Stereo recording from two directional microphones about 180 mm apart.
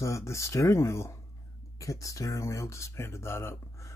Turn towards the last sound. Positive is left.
turn(degrees=15)  # may be behind; listen again after turning